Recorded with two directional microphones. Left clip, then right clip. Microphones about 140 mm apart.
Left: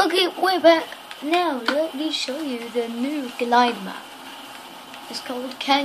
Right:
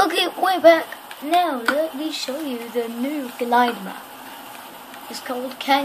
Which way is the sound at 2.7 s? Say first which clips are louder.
Right 1 dB; 5° right (ahead or behind).